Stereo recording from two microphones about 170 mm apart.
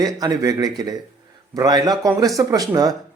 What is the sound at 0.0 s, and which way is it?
Speech, 20° right (ahead or behind).